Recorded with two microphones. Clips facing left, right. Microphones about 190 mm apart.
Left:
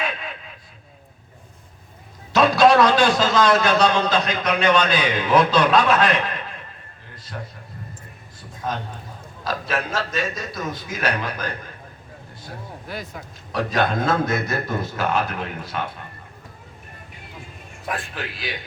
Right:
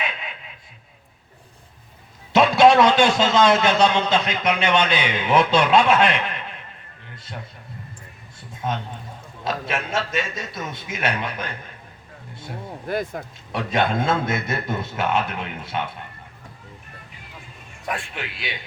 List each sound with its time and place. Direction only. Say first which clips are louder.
2.3 s a man's voice: right 1 dB; 25° right (ahead or behind)
8.4 s a sound: right 1 dB; 25° right (ahead or behind)
9.4 s a man's voice: left 1 dB; 25° right (ahead or behind)
12.9 s speech: right 8 dB; 50° right (ahead or behind)
13.5 s a man's voice: left 1 dB; 25° right (ahead or behind)
17.9 s a man's voice: left 2 dB; 25° right (ahead or behind)